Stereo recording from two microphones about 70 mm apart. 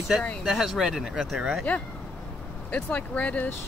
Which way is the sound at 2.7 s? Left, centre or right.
Left.